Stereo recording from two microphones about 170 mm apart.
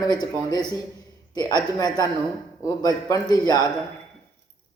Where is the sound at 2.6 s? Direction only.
20° left (ahead or behind).